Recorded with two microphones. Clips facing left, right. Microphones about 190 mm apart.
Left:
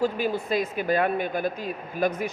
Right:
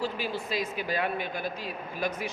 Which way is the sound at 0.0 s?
50° left (ahead or behind).